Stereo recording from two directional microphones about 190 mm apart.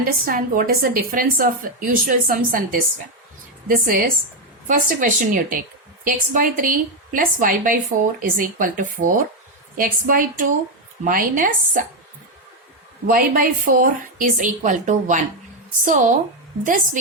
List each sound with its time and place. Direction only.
0.3 s a woman's voice: 50° right (ahead or behind)
13.1 s a woman's voice: 50° right (ahead or behind)